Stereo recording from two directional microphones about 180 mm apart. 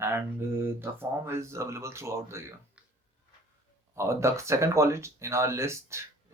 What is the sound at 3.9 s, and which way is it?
Speech, 15° right (ahead or behind).